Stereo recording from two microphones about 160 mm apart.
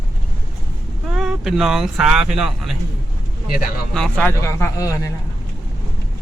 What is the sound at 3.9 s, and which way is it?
Speech, 5° left (ahead or behind).